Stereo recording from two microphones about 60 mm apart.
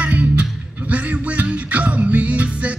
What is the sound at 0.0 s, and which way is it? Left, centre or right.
Music, right.